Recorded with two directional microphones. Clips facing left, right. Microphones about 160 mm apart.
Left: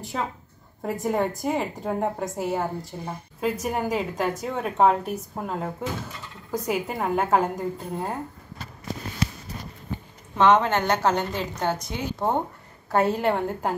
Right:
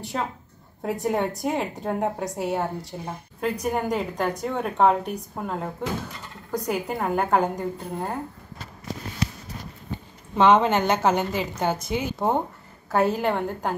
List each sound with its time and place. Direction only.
0.0 s a woman's voice: centre (ahead or behind)
10.4 s a woman's voice: 10° right (ahead or behind)